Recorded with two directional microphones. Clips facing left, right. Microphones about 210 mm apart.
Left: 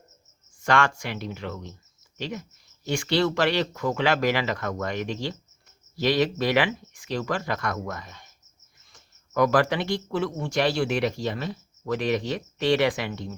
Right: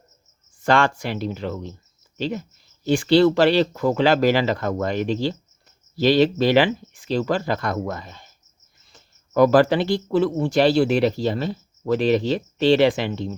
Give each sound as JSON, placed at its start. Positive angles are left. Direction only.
{"t": 0.6, "sound": "speech", "side_deg": -30}